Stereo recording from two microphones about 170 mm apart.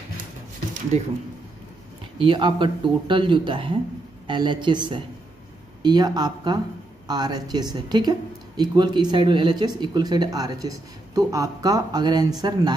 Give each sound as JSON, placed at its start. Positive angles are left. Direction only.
{"t": 2.1, "sound": "speech", "side_deg": -30}